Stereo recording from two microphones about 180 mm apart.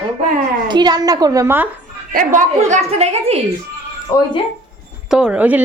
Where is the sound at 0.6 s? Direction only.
25° right (ahead or behind).